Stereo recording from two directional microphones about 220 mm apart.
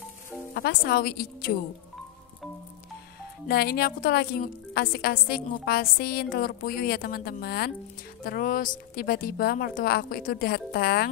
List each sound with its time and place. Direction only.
0.6 s a woman's voice: 45° left (ahead or behind)
3.4 s a woman's voice: 45° left (ahead or behind)